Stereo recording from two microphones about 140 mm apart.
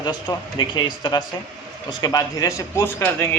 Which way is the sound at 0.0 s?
30° left (ahead or behind).